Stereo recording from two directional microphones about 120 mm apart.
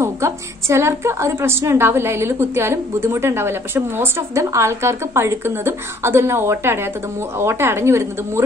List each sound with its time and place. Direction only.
0.0 s a woman's voice: 25° right (ahead or behind)